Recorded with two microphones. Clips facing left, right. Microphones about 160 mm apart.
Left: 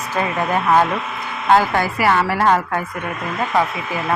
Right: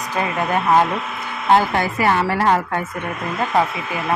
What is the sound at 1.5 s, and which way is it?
Speech, 25° right (ahead or behind).